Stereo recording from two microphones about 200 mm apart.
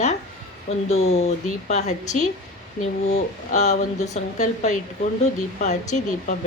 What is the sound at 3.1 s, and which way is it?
Speech, 35° left (ahead or behind).